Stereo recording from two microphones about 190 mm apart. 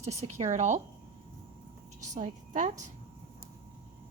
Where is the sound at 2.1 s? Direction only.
40° right (ahead or behind).